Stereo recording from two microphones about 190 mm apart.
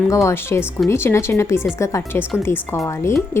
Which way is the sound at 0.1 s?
15° left (ahead or behind).